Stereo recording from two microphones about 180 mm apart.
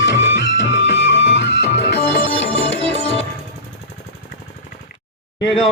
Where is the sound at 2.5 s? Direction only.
35° left (ahead or behind).